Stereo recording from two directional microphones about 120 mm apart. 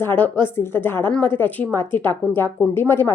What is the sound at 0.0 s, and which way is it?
A woman's voice, 20° left (ahead or behind).